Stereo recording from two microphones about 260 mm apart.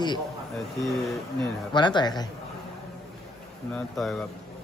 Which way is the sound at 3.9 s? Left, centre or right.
Centre.